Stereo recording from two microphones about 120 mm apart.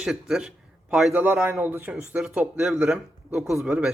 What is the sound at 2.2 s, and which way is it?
Speech, 5° right (ahead or behind).